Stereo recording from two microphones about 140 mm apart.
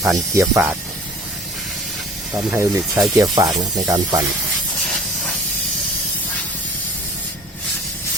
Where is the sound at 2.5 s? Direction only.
20° right (ahead or behind).